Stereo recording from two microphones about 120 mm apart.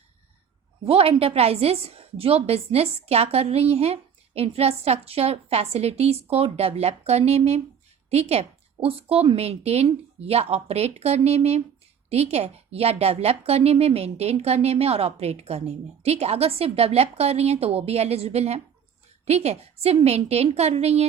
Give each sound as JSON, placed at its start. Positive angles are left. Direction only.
{"t": 0.9, "sound": "a woman's voice", "side_deg": -50}